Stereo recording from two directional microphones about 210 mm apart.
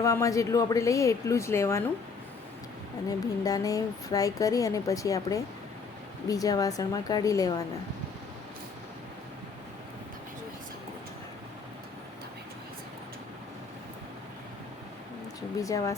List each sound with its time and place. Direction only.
0.0 s speech: 15° left (ahead or behind)
3.1 s speech: 15° left (ahead or behind)
15.6 s speech: 15° left (ahead or behind)